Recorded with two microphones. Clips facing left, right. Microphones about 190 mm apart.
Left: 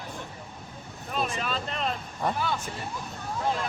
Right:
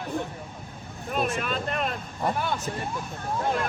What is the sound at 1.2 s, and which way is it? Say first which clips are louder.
Speech: right 3 dB; 50° right (ahead or behind).